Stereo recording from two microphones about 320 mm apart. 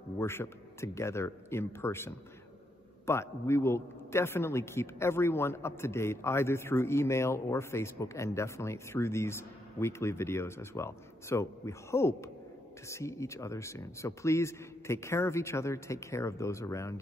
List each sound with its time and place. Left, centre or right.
0.2 s a man's voice: centre